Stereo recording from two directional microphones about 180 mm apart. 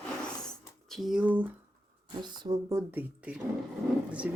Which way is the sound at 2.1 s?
25° right (ahead or behind).